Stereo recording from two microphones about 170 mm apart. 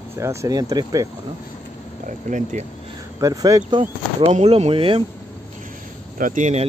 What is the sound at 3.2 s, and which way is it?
Speech, 20° right (ahead or behind).